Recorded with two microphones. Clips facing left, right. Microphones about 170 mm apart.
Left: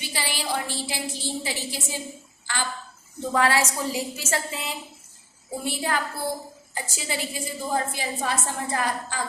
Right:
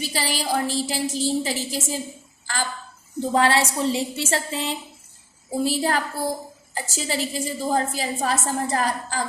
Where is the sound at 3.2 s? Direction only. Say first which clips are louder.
Right 3 dB; 30° right (ahead or behind).